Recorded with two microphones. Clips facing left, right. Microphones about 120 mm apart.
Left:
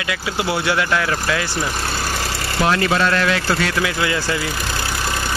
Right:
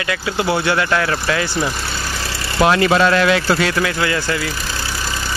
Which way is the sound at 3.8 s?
10° left (ahead or behind).